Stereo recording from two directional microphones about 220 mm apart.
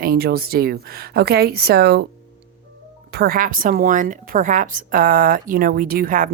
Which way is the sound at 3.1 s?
45° right (ahead or behind).